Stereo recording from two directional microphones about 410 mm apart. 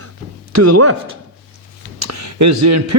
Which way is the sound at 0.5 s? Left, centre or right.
Right.